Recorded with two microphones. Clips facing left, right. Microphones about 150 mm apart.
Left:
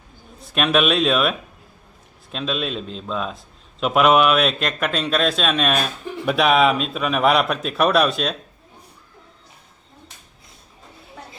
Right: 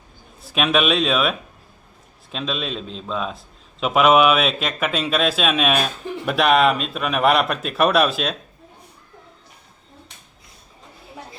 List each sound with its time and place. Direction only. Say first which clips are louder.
0.4 s a man's voice: left 1 dB; centre (ahead or behind)